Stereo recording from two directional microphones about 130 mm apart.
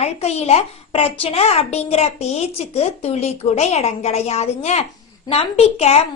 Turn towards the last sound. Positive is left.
turn(degrees=55)  # may be behind; listen again after turning